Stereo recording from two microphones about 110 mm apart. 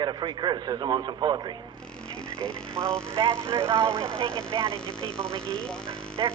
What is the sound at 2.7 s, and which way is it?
Speech, 25° right (ahead or behind).